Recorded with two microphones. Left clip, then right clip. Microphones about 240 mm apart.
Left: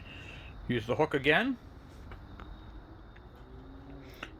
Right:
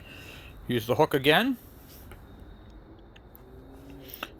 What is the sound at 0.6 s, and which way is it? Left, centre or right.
Speech, right.